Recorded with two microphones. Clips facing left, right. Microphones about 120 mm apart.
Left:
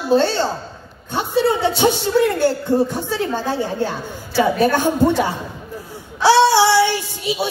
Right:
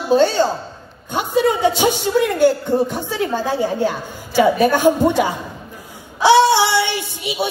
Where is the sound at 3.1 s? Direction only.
15° right (ahead or behind).